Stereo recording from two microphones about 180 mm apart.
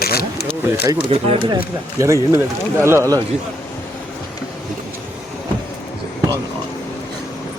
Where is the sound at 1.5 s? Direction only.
20° right (ahead or behind).